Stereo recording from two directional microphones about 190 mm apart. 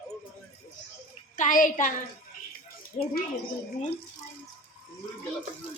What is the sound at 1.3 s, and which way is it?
Speech, 45° left (ahead or behind).